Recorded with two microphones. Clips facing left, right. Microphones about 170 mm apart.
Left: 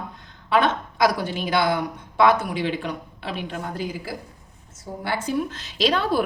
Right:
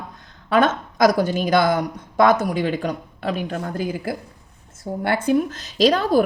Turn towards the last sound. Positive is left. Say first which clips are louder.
# right 5 dB
turn(degrees=-40)  # may be behind; listen again after turning